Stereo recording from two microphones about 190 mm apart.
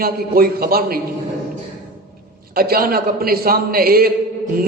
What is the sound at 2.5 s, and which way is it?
A man's voice, 50° right (ahead or behind).